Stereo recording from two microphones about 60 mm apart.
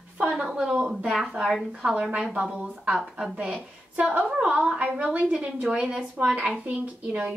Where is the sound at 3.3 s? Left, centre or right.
Centre.